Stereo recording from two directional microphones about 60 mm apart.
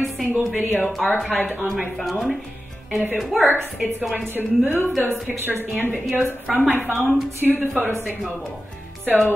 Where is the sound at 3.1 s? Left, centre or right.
Centre.